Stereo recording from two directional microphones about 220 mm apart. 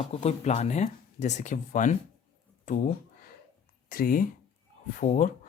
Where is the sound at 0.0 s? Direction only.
30° left (ahead or behind).